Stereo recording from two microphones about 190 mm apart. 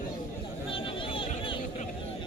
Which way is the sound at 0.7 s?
25° left (ahead or behind).